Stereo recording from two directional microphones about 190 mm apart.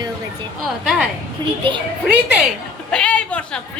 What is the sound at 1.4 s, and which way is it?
Speech, 25° right (ahead or behind).